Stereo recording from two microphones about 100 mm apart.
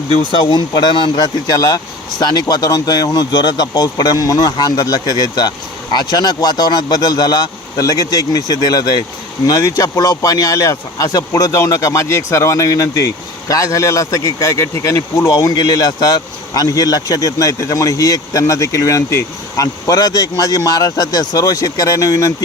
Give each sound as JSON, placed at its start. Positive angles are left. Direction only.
{"t": 0.1, "sound": "speech", "side_deg": 55}